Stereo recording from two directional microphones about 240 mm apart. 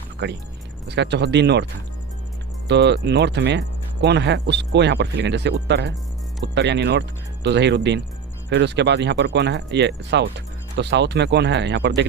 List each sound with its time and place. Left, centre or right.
0.2 s speech: right
2.6 s speech: right